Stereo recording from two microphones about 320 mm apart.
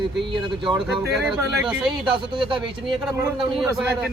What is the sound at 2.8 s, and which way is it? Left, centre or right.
A man's voice, centre.